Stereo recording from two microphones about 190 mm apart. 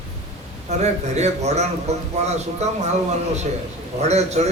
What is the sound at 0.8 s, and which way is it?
A man's voice, 35° right (ahead or behind).